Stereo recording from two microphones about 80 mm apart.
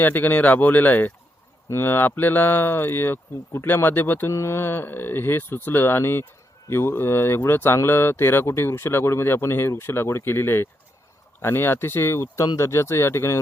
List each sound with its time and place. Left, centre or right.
0.0 s speech: left
4.3 s speech: left